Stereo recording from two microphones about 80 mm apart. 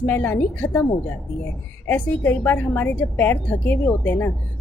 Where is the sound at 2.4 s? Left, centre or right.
Left.